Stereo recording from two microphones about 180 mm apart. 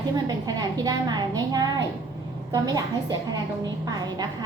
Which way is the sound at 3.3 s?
20° right (ahead or behind).